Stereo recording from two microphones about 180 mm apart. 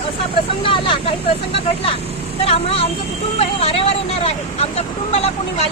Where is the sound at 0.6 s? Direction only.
30° left (ahead or behind).